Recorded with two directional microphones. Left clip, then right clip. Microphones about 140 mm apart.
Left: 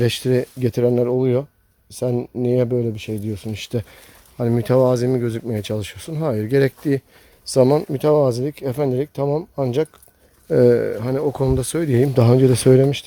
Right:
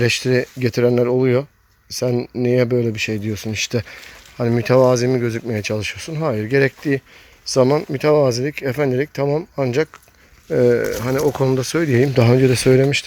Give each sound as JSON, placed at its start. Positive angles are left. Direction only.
{"t": 0.0, "sound": "speech", "side_deg": 20}
{"t": 2.7, "sound": "speech", "side_deg": 0}
{"t": 7.9, "sound": "speech", "side_deg": 20}
{"t": 10.5, "sound": "speech", "side_deg": 30}
{"t": 10.9, "sound": "speech", "side_deg": 10}